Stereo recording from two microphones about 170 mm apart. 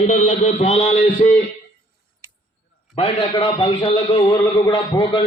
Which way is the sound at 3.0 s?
30° left (ahead or behind).